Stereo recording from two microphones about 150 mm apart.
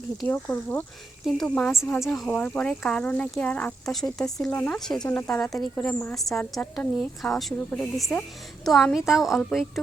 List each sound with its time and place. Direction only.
0.3 s a woman's voice: 10° left (ahead or behind)